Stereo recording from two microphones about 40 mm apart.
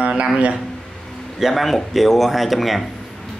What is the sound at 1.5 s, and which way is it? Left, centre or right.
Speech, centre.